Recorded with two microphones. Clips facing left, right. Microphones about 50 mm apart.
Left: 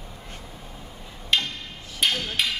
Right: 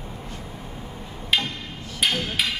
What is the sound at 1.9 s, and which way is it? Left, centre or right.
Hammer, centre.